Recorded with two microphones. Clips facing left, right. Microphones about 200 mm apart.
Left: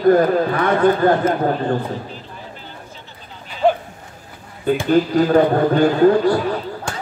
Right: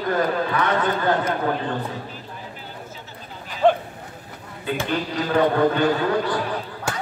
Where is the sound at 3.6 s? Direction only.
10° left (ahead or behind).